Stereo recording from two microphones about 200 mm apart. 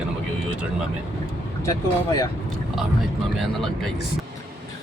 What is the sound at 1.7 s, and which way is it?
Speech, 15° left (ahead or behind).